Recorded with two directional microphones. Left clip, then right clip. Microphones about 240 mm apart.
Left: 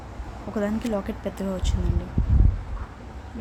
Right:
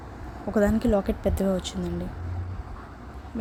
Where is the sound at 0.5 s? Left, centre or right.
Centre.